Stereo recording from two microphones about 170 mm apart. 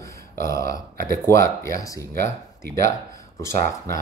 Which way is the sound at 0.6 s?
65° right (ahead or behind).